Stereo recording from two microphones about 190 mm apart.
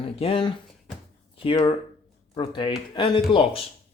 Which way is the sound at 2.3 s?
25° left (ahead or behind).